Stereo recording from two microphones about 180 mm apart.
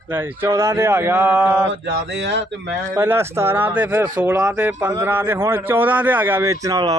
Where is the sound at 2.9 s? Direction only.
15° right (ahead or behind).